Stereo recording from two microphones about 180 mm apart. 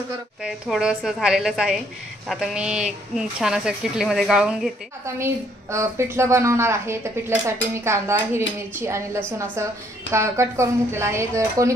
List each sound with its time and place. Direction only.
0.4 s speech: 5° right (ahead or behind)
5.0 s a woman's voice: 15° right (ahead or behind)